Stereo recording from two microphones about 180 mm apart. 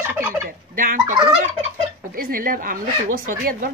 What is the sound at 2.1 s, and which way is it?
Speech, 50° right (ahead or behind).